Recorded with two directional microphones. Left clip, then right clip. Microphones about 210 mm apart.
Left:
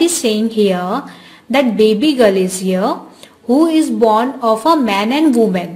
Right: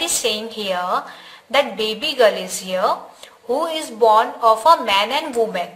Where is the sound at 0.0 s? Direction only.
30° left (ahead or behind).